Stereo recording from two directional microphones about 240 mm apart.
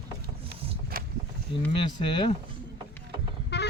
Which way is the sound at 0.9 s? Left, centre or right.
Right.